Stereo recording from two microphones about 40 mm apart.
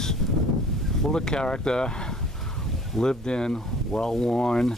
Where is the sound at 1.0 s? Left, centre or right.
Centre.